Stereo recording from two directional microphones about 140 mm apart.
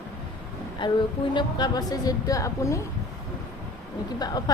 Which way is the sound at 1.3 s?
35° left (ahead or behind).